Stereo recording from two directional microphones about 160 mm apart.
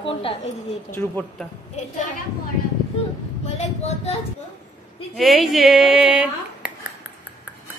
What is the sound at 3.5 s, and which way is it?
Speech, 40° left (ahead or behind).